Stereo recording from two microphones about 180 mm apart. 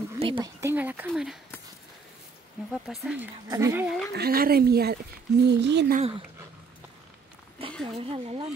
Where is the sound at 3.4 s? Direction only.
15° right (ahead or behind).